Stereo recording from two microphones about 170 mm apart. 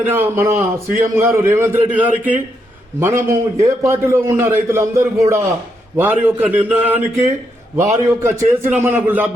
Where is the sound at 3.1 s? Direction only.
45° right (ahead or behind).